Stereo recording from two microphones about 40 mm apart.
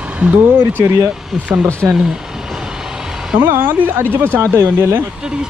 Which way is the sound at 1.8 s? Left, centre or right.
Centre.